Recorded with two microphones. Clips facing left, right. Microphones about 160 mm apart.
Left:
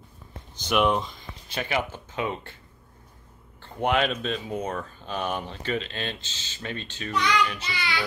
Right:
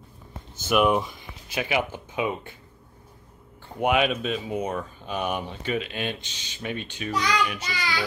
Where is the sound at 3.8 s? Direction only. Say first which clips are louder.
Right 2 dB; 10° right (ahead or behind).